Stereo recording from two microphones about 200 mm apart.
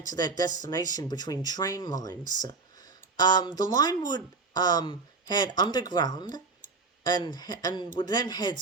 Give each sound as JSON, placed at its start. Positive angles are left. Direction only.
{"t": 0.1, "sound": "speech", "side_deg": 20}